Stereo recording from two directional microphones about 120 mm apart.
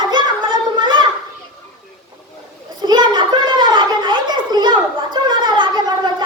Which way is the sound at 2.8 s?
35° right (ahead or behind).